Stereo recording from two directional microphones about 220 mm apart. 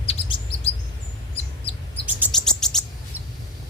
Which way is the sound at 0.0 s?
25° left (ahead or behind).